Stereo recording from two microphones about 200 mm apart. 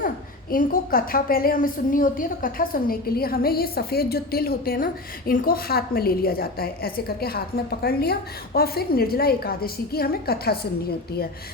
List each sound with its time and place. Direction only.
0.5 s a woman's voice: 45° left (ahead or behind)